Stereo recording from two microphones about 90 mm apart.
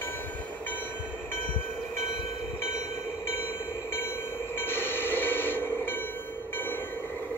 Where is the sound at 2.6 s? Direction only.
30° left (ahead or behind).